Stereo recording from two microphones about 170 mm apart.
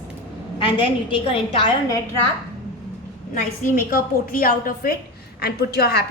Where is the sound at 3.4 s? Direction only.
50° left (ahead or behind).